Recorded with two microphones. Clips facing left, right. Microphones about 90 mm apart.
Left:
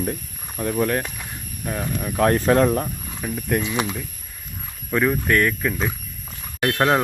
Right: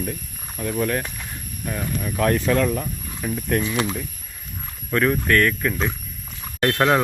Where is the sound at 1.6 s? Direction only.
20° left (ahead or behind).